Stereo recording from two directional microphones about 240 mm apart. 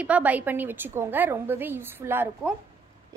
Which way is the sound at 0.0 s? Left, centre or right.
Centre.